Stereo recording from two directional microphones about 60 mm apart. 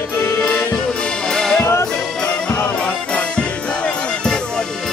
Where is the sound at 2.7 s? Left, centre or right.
Centre.